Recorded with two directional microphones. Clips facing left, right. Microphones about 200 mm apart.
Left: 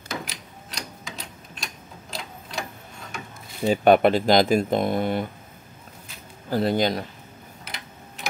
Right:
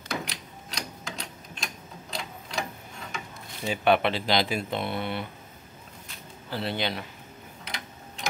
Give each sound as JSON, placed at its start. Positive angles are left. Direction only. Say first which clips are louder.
{"t": 0.2, "sound": "typewriter", "louder": "even", "side_deg": 0}
{"t": 3.6, "sound": "speech", "louder": "left 7 dB", "side_deg": 45}
{"t": 6.5, "sound": "speech", "louder": "left 8 dB", "side_deg": 45}
{"t": 7.6, "sound": "tick-tock", "louder": "right 1 dB", "side_deg": 5}